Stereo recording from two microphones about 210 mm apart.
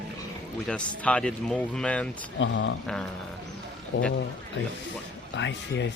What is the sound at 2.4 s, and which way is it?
Speech, 60° left (ahead or behind).